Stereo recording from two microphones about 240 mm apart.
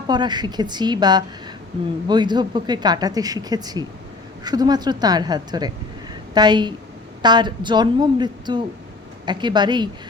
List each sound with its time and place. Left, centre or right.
0.1 s a woman's voice: centre